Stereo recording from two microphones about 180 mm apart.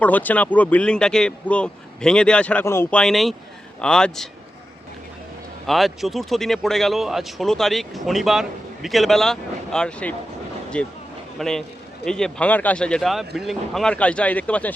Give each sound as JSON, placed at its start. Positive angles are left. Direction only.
{"t": 0.0, "sound": "a man's voice", "side_deg": 10}
{"t": 5.6, "sound": "a man's voice", "side_deg": 0}